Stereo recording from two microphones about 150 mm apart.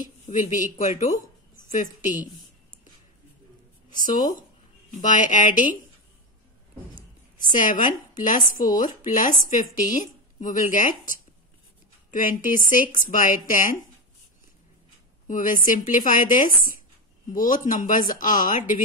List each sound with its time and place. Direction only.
0.0 s speech: 60° left (ahead or behind)
5.0 s speech: 60° left (ahead or behind)
7.3 s speech: 60° left (ahead or behind)
15.2 s speech: 65° left (ahead or behind)